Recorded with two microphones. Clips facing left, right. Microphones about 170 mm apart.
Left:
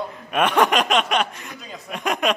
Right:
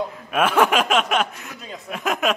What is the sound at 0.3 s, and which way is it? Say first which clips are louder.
Speech: even; 5° right (ahead or behind).